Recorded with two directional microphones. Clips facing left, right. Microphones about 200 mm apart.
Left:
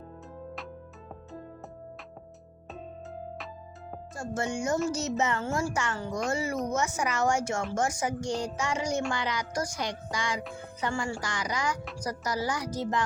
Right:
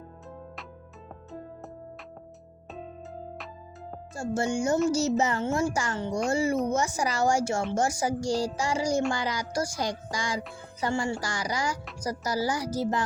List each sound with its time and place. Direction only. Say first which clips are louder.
4.1 s a child's voice: right 4 dB; 30° right (ahead or behind)